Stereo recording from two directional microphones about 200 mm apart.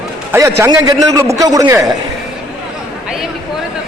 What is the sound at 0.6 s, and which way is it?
A man's voice, 15° right (ahead or behind).